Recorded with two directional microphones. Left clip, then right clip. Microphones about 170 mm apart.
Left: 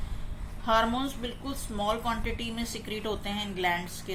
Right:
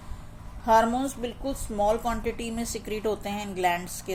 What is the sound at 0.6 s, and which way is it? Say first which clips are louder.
A woman's voice: right 4 dB; 60° right (ahead or behind).